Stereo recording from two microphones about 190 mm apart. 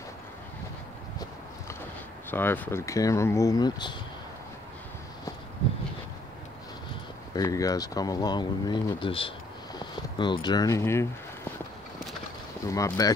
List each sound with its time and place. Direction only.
2.3 s speech: 10° left (ahead or behind)
7.3 s speech: 20° left (ahead or behind)
12.6 s speech: 15° left (ahead or behind)